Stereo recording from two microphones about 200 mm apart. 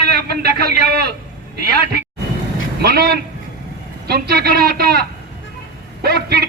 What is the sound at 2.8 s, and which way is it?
A man's voice, 50° right (ahead or behind).